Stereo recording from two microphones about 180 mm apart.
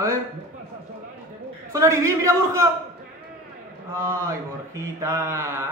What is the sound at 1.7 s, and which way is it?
A man's voice, 15° right (ahead or behind).